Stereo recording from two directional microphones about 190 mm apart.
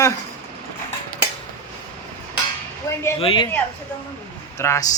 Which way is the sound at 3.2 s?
30° left (ahead or behind).